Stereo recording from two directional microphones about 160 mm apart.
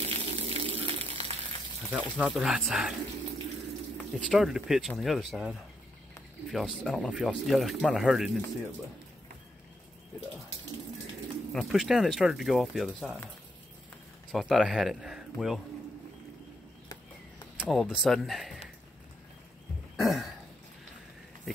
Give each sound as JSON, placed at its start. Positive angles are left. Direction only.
{"t": 0.0, "sound": "water", "side_deg": -40}
{"t": 1.9, "sound": "speech", "side_deg": -10}
{"t": 4.1, "sound": "speech", "side_deg": -5}
{"t": 11.5, "sound": "speech", "side_deg": 0}
{"t": 14.3, "sound": "speech", "side_deg": 0}
{"t": 17.6, "sound": "speech", "side_deg": 0}
{"t": 20.0, "sound": "throat clearing", "side_deg": 0}